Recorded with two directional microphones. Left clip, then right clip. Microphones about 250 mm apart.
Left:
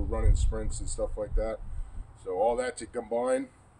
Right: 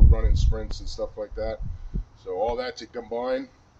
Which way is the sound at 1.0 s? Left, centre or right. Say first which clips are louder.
Right 2 dB; centre.